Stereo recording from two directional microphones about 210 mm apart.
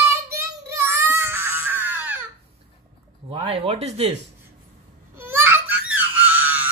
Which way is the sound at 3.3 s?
25° right (ahead or behind).